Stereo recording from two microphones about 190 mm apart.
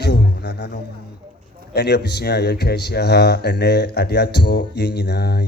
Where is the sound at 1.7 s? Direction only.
65° left (ahead or behind).